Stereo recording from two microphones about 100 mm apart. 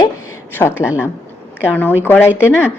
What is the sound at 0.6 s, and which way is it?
Speech, 25° left (ahead or behind).